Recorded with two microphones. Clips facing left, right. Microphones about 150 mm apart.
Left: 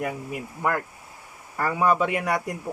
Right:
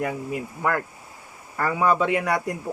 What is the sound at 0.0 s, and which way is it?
Speech, 10° left (ahead or behind).